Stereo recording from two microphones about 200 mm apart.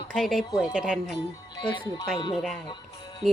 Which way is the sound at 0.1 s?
Centre (ahead or behind).